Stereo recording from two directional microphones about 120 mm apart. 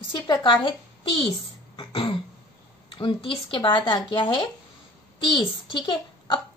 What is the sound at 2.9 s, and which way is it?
A child's voice, 45° left (ahead or behind).